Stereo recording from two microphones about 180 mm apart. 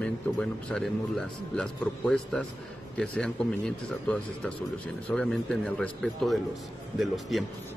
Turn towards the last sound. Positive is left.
turn(degrees=0)  # may be behind; listen again after turning